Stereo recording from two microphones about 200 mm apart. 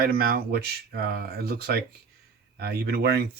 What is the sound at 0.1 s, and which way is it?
Speech, 50° right (ahead or behind).